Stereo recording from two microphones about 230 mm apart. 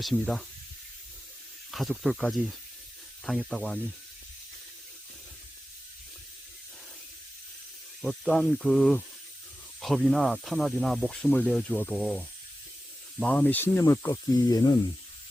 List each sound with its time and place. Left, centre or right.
0.0 s speech: centre
1.7 s speech: centre
8.0 s speech: centre